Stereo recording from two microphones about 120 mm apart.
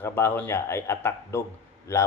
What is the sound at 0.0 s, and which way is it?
Speech, 20° left (ahead or behind).